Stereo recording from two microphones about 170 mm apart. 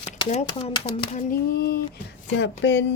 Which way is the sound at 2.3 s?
90° left.